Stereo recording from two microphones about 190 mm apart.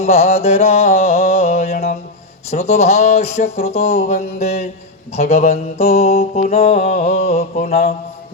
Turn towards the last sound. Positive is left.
turn(degrees=35)  # may be behind; listen again after turning